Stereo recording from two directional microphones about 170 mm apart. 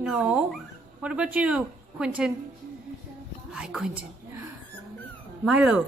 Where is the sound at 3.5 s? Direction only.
5° right (ahead or behind).